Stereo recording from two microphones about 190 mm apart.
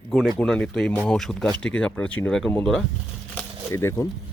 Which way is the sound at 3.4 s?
15° left (ahead or behind).